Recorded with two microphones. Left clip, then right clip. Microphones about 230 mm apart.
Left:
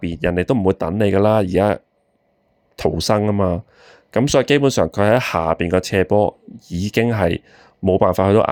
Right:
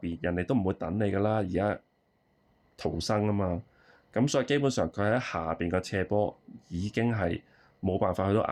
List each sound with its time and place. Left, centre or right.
0.0 s speech: left